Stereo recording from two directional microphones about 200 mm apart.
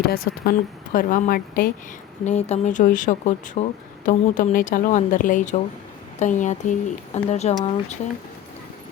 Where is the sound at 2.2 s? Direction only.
35° left (ahead or behind).